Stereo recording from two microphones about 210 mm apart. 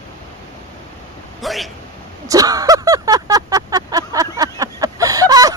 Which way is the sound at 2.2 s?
15° right (ahead or behind).